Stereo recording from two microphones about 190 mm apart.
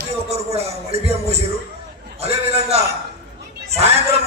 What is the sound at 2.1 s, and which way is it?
Speech, 35° right (ahead or behind).